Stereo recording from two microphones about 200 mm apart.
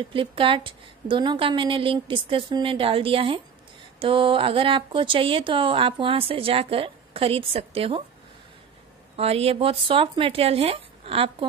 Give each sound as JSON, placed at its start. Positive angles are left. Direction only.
{"t": 0.1, "sound": "speech", "side_deg": -25}
{"t": 9.1, "sound": "speech", "side_deg": -30}